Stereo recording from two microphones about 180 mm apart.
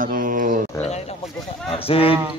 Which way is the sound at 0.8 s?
35° left (ahead or behind).